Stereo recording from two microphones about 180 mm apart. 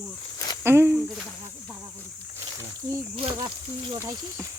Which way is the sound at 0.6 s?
15° right (ahead or behind).